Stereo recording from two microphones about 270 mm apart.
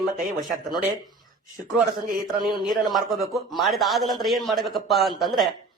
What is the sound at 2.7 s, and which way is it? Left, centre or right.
A man's voice, centre.